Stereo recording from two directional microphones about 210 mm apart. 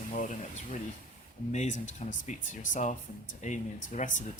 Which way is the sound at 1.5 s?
35° left (ahead or behind).